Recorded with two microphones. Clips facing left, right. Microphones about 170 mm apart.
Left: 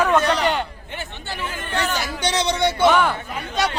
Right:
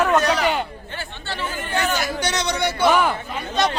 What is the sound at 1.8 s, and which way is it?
Speech, 10° right (ahead or behind).